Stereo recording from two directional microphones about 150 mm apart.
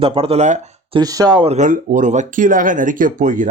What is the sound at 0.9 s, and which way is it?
Speech, 25° right (ahead or behind).